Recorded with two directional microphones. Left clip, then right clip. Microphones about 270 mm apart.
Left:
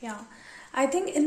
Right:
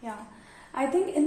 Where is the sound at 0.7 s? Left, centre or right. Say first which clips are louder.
Left 3 dB; left.